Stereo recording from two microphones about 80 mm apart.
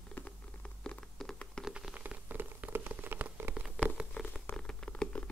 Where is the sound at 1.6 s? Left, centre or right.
Centre.